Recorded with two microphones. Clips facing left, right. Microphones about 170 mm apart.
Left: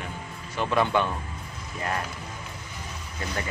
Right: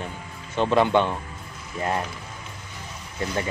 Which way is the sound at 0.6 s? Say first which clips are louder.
Right 4 dB; 20° right (ahead or behind).